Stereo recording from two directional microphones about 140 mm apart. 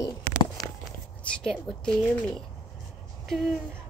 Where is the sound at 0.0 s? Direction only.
30° left (ahead or behind).